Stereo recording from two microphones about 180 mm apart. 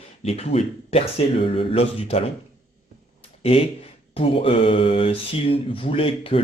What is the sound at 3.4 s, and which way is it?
Speech, 35° left (ahead or behind).